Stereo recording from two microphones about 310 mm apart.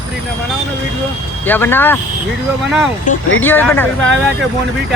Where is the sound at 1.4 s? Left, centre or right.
Centre.